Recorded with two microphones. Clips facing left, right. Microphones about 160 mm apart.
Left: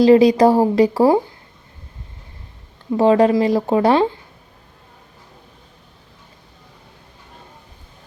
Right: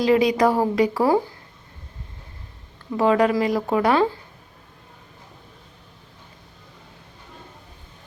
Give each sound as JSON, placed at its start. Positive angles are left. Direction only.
{"t": 0.0, "sound": "a woman's voice", "side_deg": 30}
{"t": 2.9, "sound": "speech", "side_deg": 30}